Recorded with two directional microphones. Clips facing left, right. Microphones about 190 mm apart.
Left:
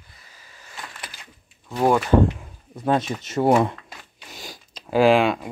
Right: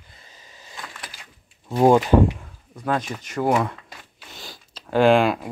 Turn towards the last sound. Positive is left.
turn(degrees=0)  # may be behind; listen again after turning